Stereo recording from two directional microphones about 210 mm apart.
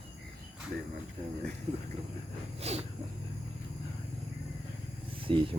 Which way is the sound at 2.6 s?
30° right (ahead or behind).